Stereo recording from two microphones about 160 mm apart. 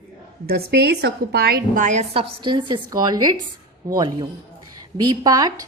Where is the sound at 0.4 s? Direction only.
75° right (ahead or behind); by 2.2 s 45° right (ahead or behind).